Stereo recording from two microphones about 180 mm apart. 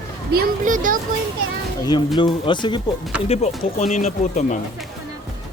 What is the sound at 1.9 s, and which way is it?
Speech, 25° left (ahead or behind).